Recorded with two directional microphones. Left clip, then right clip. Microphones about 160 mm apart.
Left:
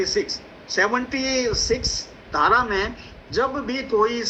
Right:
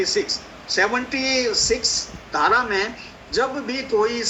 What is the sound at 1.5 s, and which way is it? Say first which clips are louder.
Speech: right 3 dB; 90° right.